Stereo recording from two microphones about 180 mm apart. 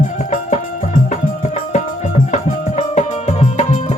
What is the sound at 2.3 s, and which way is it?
Music, 40° left (ahead or behind).